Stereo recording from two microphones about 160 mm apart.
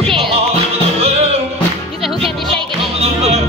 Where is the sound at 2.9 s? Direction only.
40° right (ahead or behind).